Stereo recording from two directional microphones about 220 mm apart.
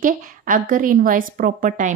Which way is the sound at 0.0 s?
35° right (ahead or behind).